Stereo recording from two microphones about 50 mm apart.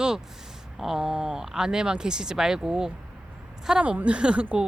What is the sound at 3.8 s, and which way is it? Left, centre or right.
Speech, right.